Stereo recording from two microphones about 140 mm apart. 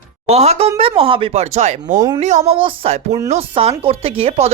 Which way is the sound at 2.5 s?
40° right (ahead or behind).